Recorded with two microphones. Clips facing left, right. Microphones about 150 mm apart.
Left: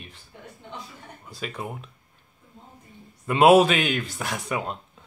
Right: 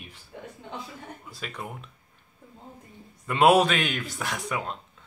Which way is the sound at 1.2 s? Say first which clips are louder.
Left 6 dB; centre (ahead or behind).